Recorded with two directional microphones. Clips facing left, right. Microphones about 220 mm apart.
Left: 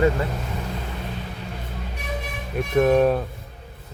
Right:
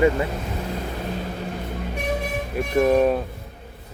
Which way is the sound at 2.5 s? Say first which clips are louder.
Left 1 dB; centre (ahead or behind).